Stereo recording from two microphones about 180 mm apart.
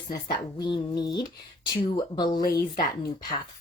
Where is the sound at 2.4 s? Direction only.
55° left (ahead or behind).